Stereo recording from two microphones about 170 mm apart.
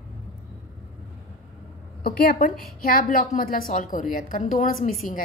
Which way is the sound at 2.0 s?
60° left (ahead or behind).